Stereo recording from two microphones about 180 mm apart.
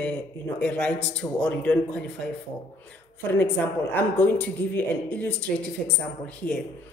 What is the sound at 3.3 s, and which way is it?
A man's voice, 10° left (ahead or behind).